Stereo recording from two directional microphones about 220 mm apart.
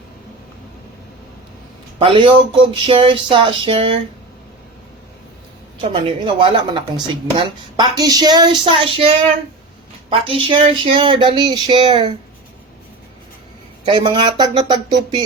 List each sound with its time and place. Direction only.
2.0 s speech: 25° right (ahead or behind)
5.8 s speech: 25° right (ahead or behind)
13.8 s speech: 20° right (ahead or behind)